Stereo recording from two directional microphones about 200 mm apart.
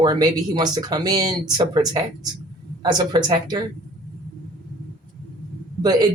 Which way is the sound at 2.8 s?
20° right (ahead or behind).